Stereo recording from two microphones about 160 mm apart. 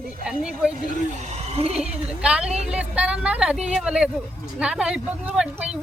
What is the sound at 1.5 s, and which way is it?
Speech, 40° right (ahead or behind).